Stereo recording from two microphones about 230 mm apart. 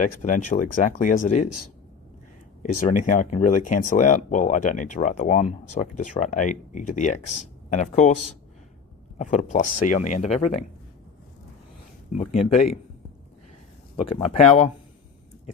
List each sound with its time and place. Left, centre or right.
0.0 s speech: left
2.8 s speech: left
12.1 s speech: left
14.2 s speech: left